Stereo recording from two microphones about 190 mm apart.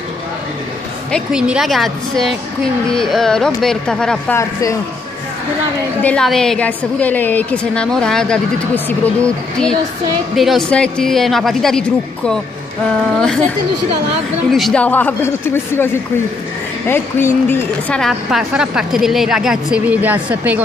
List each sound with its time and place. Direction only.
1.1 s a woman's voice: 5° right (ahead or behind)
4.4 s speech: 15° left (ahead or behind)
6.0 s a woman's voice: 5° left (ahead or behind)
14.5 s a woman's voice: 5° left (ahead or behind)